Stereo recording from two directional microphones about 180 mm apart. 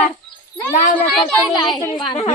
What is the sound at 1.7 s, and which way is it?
Speech, 25° left (ahead or behind).